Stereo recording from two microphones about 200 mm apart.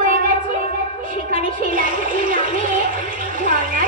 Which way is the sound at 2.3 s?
40° right (ahead or behind).